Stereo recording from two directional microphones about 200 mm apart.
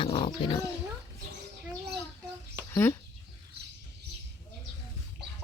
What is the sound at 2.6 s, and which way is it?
Chicken, 15° left (ahead or behind).